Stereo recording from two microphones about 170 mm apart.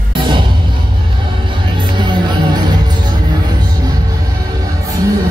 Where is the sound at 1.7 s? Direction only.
25° right (ahead or behind).